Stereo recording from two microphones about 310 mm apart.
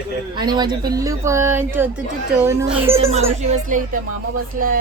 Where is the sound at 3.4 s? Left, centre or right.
Right.